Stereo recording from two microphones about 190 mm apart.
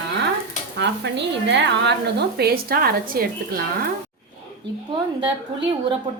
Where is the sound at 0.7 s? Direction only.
65° right (ahead or behind).